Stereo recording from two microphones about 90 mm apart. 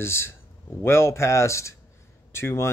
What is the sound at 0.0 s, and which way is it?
Speech, 30° left (ahead or behind).